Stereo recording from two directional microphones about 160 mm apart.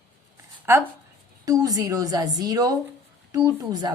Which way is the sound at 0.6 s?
15° right (ahead or behind).